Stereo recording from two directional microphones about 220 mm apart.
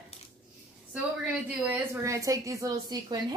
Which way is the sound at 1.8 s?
15° right (ahead or behind).